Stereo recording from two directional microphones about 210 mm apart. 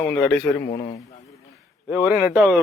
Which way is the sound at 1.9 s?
10° right (ahead or behind).